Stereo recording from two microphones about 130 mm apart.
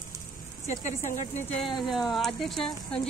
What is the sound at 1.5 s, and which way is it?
Speech, 45° left (ahead or behind).